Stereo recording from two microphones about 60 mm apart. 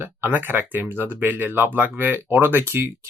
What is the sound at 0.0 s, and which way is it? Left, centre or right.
Speech, right.